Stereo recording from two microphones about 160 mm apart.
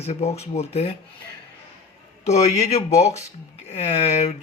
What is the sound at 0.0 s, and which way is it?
Speech, 40° left (ahead or behind).